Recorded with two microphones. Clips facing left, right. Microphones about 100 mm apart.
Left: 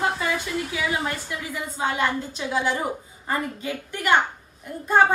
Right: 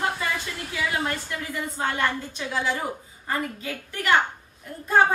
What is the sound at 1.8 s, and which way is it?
A woman's voice, 15° left (ahead or behind).